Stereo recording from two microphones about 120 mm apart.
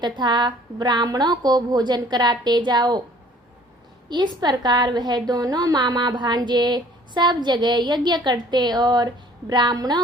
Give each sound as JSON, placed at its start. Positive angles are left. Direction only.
{"t": 0.0, "sound": "a woman's voice", "side_deg": -40}
{"t": 4.1, "sound": "a woman's voice", "side_deg": -35}